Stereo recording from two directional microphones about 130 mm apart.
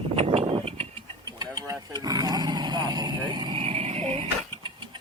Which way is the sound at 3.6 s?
50° right (ahead or behind).